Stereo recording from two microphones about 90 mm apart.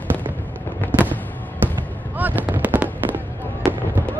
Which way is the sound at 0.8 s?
20° left (ahead or behind).